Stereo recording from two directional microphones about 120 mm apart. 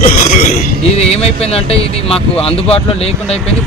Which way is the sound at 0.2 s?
70° left (ahead or behind).